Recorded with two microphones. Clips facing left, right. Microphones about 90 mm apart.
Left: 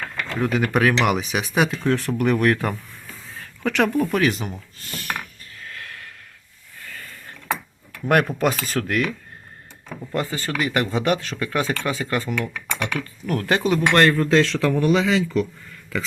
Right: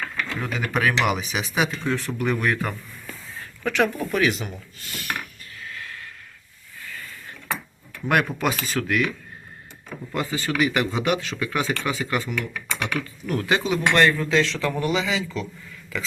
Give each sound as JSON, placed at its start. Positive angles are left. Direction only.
{"t": 0.3, "sound": "speech", "side_deg": 50}
{"t": 5.6, "sound": "a sound", "side_deg": 60}
{"t": 8.1, "sound": "speech", "side_deg": 45}
{"t": 10.2, "sound": "speech", "side_deg": 40}